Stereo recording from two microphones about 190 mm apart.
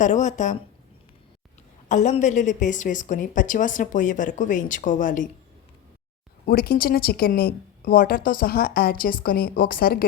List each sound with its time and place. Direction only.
0.0 s a woman's voice: 40° left (ahead or behind)
1.9 s a woman's voice: 40° left (ahead or behind)
6.4 s a woman's voice: 55° left (ahead or behind)